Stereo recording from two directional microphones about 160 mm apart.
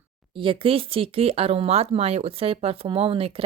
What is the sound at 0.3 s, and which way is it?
Speech, 35° right (ahead or behind).